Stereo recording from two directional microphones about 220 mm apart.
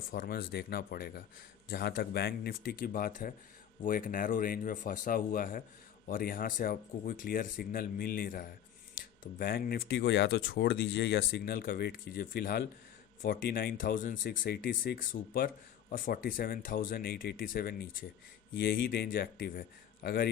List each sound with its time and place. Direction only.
0.1 s speech: 45° left (ahead or behind)